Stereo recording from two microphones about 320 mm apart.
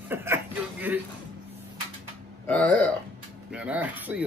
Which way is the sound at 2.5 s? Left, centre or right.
Centre.